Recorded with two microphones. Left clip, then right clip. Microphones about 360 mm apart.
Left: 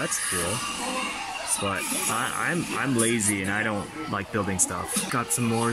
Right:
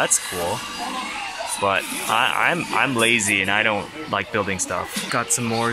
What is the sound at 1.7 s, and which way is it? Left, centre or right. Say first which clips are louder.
Speech: right 8 dB; centre.